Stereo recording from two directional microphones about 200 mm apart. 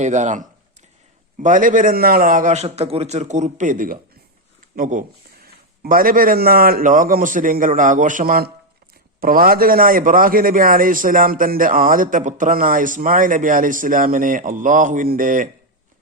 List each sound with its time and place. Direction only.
0.0 s a man's voice: 35° right (ahead or behind)